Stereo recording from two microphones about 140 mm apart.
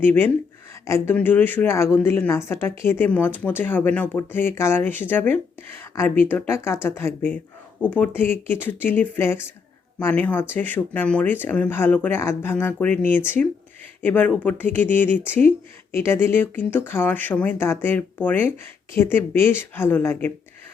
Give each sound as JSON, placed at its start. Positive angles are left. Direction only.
{"t": 0.0, "sound": "a woman's voice", "side_deg": 15}